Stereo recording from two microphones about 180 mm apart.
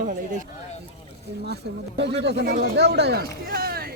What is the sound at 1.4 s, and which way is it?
Speech, 70° right (ahead or behind).